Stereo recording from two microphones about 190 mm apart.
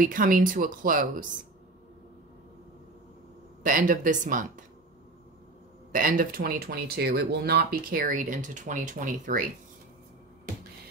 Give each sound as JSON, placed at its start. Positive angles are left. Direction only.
{"t": 0.0, "sound": "speech", "side_deg": -45}
{"t": 3.6, "sound": "speech", "side_deg": -45}
{"t": 5.9, "sound": "speech", "side_deg": -45}